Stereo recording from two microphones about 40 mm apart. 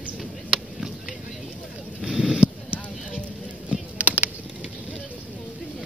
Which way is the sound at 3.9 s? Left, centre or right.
Right.